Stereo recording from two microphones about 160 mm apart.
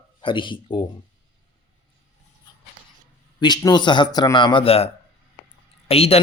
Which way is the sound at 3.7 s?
30° left (ahead or behind).